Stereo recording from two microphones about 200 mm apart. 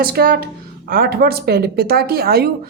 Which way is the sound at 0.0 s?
50° right (ahead or behind).